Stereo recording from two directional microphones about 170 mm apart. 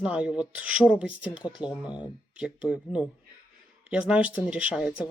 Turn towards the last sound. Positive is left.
turn(degrees=-5)  # may be behind; listen again after turning